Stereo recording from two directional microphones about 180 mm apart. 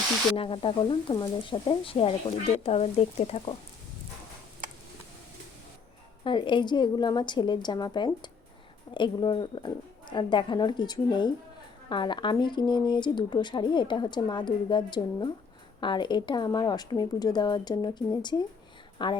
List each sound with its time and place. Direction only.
0.3 s speech: 30° left (ahead or behind)
6.2 s speech: 25° left (ahead or behind)